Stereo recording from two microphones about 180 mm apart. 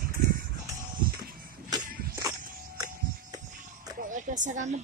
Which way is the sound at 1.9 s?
55° right (ahead or behind).